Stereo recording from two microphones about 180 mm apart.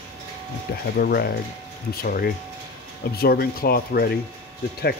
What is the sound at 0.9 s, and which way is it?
Speech, 60° left (ahead or behind).